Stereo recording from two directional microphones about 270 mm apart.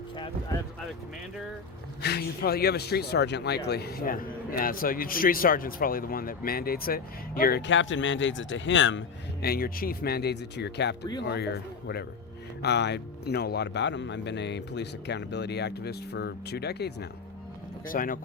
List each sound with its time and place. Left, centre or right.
2.0 s speech: left